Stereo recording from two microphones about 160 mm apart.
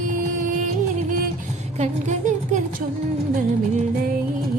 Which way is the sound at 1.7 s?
45° right (ahead or behind).